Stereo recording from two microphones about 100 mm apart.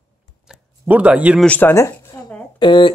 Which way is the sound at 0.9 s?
15° right (ahead or behind).